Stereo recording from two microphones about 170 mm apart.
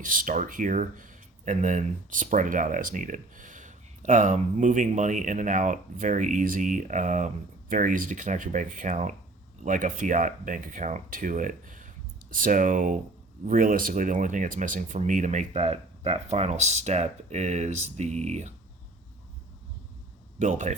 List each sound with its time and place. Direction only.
0.0 s speech: 50° right (ahead or behind)
20.4 s speech: 45° right (ahead or behind)